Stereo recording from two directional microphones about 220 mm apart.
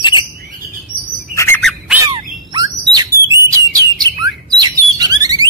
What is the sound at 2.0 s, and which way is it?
Bird, 20° right (ahead or behind).